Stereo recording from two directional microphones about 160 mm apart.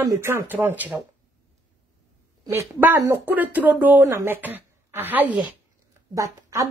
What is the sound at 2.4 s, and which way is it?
Speech, 15° right (ahead or behind).